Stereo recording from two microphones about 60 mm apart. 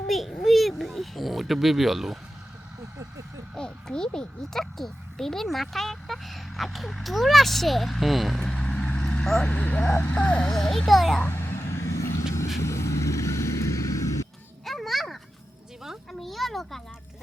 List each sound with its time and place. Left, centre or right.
0.1 s a child's voice: centre
3.5 s a child's voice: centre
11.2 s vehicle: left
14.6 s a sound: centre